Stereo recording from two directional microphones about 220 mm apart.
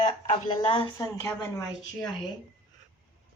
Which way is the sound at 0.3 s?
25° left (ahead or behind).